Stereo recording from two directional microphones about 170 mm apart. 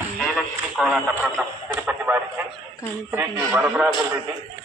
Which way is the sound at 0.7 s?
5° right (ahead or behind).